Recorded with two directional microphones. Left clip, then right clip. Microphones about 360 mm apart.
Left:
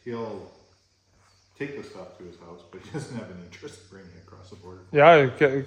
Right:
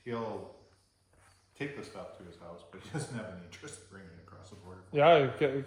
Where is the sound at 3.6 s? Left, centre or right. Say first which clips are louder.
Left 7 dB; centre.